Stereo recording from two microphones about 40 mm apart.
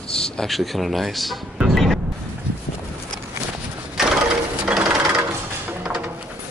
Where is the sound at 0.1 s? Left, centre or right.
Centre.